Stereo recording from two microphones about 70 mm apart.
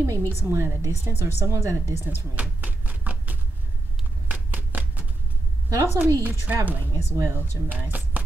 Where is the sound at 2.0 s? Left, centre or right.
Right.